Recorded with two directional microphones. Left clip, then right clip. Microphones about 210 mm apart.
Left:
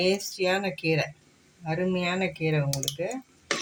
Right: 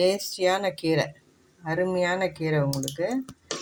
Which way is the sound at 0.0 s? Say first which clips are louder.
Right 3 dB; 40° right (ahead or behind).